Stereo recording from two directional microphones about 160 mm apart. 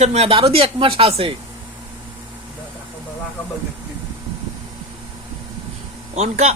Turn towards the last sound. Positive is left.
turn(degrees=-45)  # may be behind; listen again after turning